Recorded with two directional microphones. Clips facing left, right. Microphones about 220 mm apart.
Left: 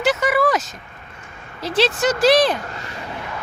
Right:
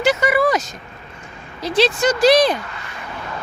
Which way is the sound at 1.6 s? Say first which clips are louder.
Right 2 dB; 5° left (ahead or behind).